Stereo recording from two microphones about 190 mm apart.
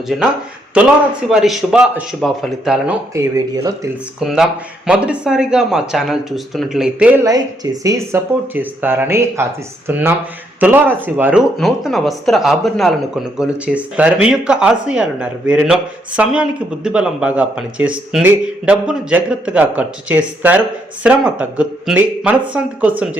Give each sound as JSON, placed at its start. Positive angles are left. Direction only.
{"t": 1.3, "sound": "speech", "side_deg": -5}
{"t": 3.2, "sound": "speech", "side_deg": -15}
{"t": 4.2, "sound": "speech", "side_deg": -5}
{"t": 7.3, "sound": "speech", "side_deg": -20}